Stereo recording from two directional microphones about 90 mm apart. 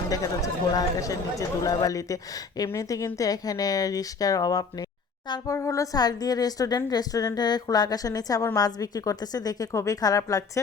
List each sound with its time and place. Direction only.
0.1 s speech: 40° left (ahead or behind)